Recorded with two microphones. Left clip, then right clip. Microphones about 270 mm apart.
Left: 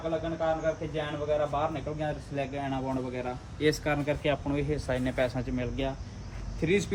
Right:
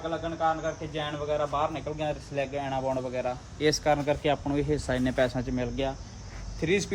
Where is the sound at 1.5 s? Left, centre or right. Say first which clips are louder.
Right 2 dB; centre.